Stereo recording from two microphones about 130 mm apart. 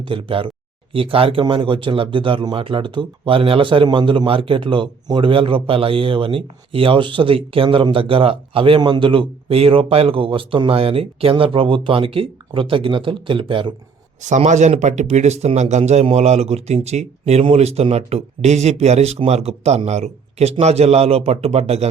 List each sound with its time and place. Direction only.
0.0 s a man's voice: 40° right (ahead or behind)
14.2 s a man's voice: 65° right (ahead or behind)